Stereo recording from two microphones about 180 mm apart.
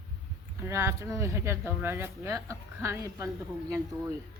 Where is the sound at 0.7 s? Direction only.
15° right (ahead or behind).